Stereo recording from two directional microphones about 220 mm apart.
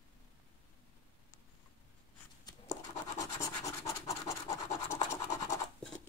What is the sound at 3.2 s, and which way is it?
Scratch, 15° left (ahead or behind).